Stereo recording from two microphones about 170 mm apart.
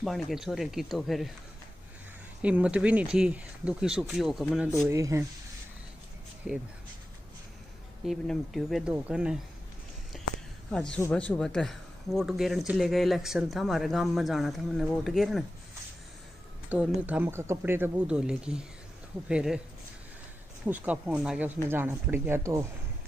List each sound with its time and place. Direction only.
0.0 s speech: centre (ahead or behind)
2.4 s speech: 5° right (ahead or behind)
4.6 s speech: 15° right (ahead or behind)
8.1 s speech: centre (ahead or behind)
10.7 s speech: 5° left (ahead or behind)
16.6 s speech: 10° right (ahead or behind)
20.6 s speech: 10° right (ahead or behind)